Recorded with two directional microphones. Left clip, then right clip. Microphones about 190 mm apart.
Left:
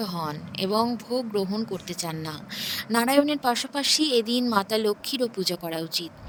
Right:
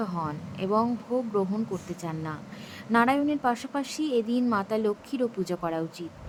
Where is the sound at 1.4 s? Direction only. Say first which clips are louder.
Even; 20° left (ahead or behind).